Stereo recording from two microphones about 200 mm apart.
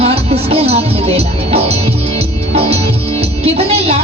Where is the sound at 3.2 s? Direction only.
30° right (ahead or behind).